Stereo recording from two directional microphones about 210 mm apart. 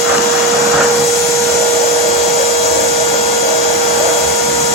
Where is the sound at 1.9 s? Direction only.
30° left (ahead or behind).